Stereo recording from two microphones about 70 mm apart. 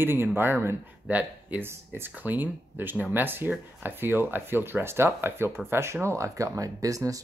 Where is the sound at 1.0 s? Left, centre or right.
Right.